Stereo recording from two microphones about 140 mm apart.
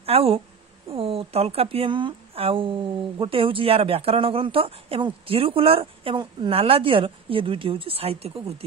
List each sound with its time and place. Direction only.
0.0 s speech: 45° right (ahead or behind)